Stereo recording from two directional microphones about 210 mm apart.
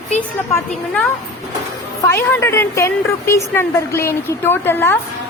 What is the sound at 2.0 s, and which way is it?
A woman's voice, 10° left (ahead or behind).